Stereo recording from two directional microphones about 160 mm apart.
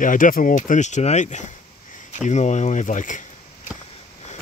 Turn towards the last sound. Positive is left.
turn(degrees=55)  # may be behind; listen again after turning